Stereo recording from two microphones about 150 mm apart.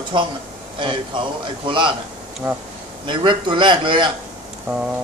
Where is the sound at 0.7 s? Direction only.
35° right (ahead or behind).